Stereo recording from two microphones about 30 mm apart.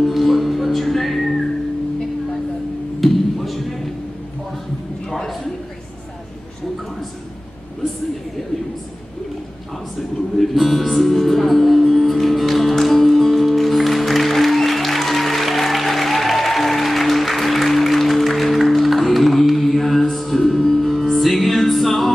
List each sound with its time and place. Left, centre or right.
0.0 s music: centre
3.0 s music: centre
10.4 s music: centre
20.4 s music: centre
20.8 s music: centre